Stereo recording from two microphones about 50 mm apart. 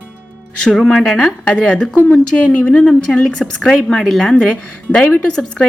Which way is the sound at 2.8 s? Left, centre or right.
Centre.